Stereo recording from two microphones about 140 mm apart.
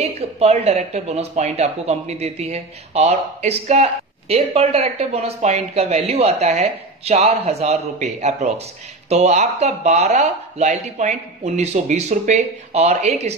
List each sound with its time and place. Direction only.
0.1 s speech: 50° right (ahead or behind)